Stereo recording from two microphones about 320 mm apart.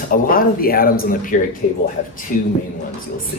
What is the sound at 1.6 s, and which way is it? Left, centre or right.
Speech, left.